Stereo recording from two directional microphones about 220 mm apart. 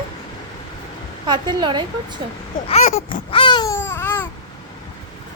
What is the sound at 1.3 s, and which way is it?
Speech, 20° right (ahead or behind).